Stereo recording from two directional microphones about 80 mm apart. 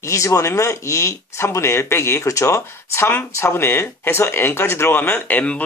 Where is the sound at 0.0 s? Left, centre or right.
Left.